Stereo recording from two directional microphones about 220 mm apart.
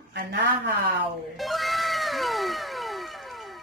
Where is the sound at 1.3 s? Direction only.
Centre (ahead or behind).